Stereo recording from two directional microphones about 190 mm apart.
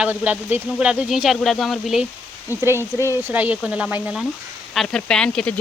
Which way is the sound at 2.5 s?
15° right (ahead or behind).